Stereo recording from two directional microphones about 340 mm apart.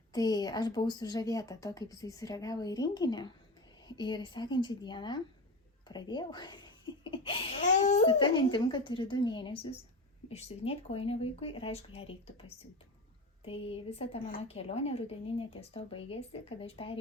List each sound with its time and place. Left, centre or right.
0.1 s speech: centre
13.4 s speech: centre